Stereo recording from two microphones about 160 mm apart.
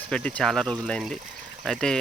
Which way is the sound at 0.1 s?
5° left (ahead or behind).